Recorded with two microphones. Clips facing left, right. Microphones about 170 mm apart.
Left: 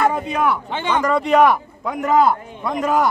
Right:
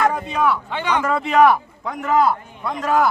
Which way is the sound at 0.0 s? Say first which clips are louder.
Left 1 dB; 10° left (ahead or behind).